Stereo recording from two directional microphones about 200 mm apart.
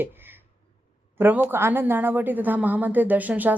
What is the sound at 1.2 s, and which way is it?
A woman's voice, 10° right (ahead or behind).